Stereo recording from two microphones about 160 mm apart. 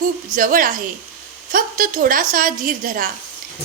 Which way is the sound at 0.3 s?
60° right (ahead or behind).